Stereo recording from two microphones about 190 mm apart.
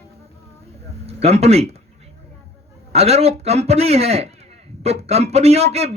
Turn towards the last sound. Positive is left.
turn(degrees=-35)  # may be behind; listen again after turning